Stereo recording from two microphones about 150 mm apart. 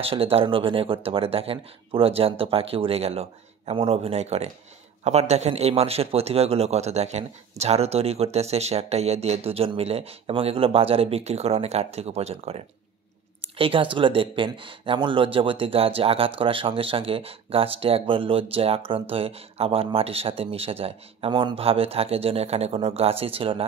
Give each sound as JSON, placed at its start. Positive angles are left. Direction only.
{"t": 0.0, "sound": "a man's voice", "side_deg": -40}